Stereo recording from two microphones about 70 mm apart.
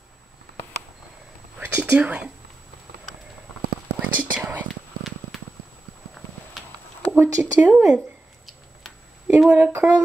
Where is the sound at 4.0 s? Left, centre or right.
Right.